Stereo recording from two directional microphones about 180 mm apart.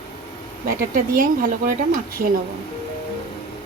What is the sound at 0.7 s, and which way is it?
Speech, 50° right (ahead or behind).